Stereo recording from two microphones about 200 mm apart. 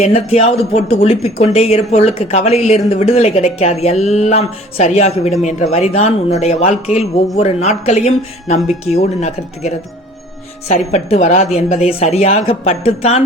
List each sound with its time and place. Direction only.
0.0 s speech: 30° left (ahead or behind)